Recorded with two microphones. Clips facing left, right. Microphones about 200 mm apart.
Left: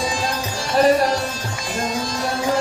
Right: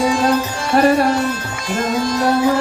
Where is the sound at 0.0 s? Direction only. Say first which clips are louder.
Right 8 dB; 65° right (ahead or behind).